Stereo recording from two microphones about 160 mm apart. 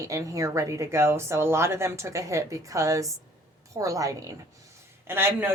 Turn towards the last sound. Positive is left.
turn(degrees=-15)  # may be behind; listen again after turning